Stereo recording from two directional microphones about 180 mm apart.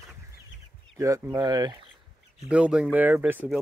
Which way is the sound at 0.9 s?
15° right (ahead or behind).